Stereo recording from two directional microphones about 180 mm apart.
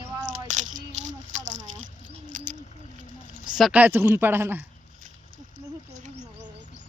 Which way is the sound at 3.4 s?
5° right (ahead or behind).